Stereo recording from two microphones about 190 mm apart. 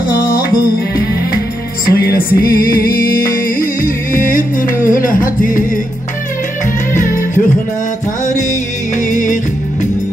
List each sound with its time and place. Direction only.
0.2 s music: 50° left (ahead or behind)
7.0 s music: 45° left (ahead or behind)
8.9 s music: 40° left (ahead or behind)